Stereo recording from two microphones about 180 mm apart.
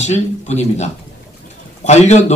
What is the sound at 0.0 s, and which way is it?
Speech, 40° left (ahead or behind).